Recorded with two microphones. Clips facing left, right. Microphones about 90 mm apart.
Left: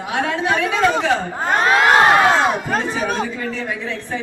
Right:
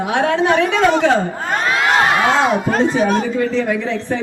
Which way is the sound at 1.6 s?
45° left (ahead or behind).